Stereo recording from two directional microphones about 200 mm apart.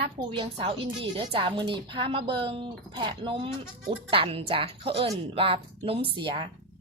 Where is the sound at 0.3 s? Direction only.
25° right (ahead or behind).